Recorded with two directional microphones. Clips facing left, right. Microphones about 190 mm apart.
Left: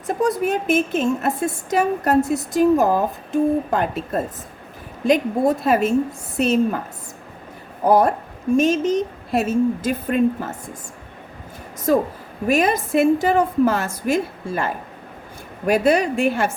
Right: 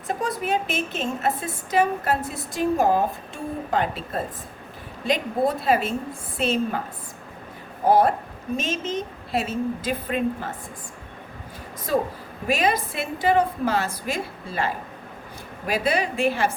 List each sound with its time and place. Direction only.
0.1 s a woman's voice: 45° left (ahead or behind)
7.9 s a woman's voice: 45° left (ahead or behind)
12.5 s a woman's voice: 45° left (ahead or behind)